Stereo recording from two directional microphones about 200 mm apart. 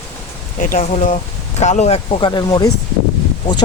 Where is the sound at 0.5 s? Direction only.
40° left (ahead or behind).